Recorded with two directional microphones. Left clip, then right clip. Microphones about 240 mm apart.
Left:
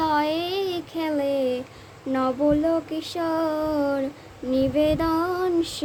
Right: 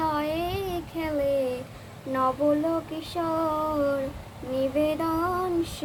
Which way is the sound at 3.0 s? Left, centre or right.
Left.